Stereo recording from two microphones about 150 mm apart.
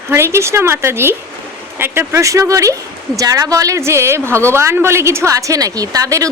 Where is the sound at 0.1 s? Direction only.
15° right (ahead or behind).